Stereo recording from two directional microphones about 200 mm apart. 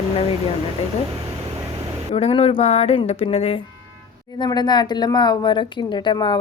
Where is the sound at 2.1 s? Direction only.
30° left (ahead or behind).